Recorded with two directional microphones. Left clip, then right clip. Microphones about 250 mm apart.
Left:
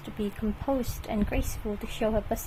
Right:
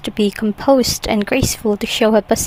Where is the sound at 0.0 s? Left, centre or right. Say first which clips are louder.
Right 15 dB; right.